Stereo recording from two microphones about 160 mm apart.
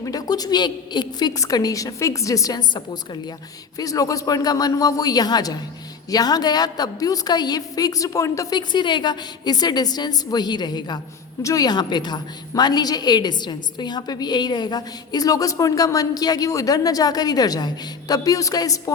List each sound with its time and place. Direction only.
0.0 s a woman's voice: 25° left (ahead or behind)